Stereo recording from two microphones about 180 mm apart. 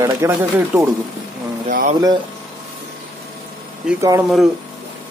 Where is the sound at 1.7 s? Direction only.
50° right (ahead or behind).